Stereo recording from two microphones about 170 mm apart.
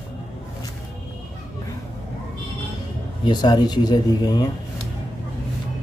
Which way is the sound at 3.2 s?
25° left (ahead or behind).